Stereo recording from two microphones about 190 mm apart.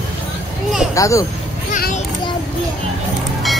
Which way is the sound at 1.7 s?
45° left (ahead or behind).